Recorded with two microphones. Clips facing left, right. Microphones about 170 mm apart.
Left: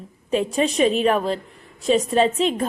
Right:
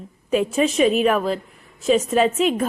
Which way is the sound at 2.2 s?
30° left (ahead or behind).